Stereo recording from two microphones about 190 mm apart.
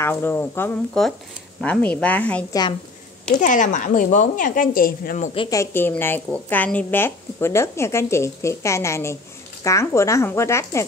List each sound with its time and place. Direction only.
0.0 s speech: 10° left (ahead or behind)
3.3 s a woman's voice: 40° left (ahead or behind)
5.3 s a woman's voice: 25° left (ahead or behind)
5.6 s speech: 10° left (ahead or behind)